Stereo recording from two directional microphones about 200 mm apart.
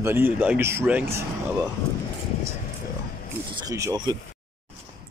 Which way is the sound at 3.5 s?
15° right (ahead or behind).